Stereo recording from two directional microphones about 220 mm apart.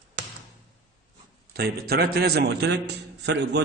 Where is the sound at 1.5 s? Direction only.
45° right (ahead or behind).